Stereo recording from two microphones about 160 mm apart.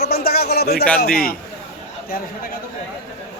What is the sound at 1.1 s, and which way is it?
Speech, 65° left (ahead or behind).